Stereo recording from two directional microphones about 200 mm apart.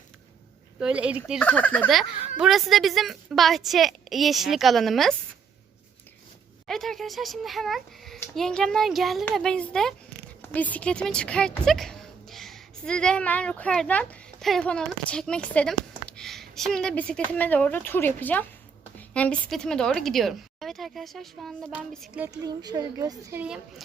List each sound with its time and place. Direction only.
0.8 s speech: 5° right (ahead or behind)
1.4 s a woman's voice: 5° left (ahead or behind)
6.7 s a woman's voice: centre (ahead or behind)
22.2 s speech: 20° right (ahead or behind)
23.4 s a woman's voice: 5° right (ahead or behind)